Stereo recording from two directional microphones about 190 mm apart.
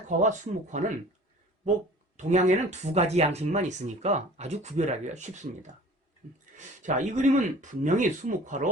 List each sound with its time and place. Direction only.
0.1 s speech: 40° right (ahead or behind)
2.1 s speech: 40° right (ahead or behind)